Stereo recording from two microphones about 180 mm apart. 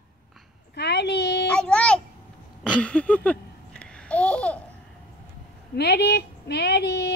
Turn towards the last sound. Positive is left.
turn(degrees=65)  # may be behind; listen again after turning